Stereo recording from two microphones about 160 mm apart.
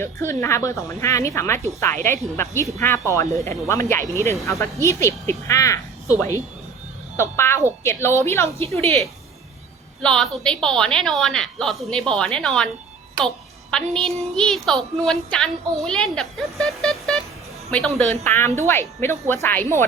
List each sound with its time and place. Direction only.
0.0 s speech: 15° left (ahead or behind)
8.6 s a woman's voice: 40° right (ahead or behind)
10.0 s a woman's voice: 5° left (ahead or behind)
18.3 s speech: 15° left (ahead or behind)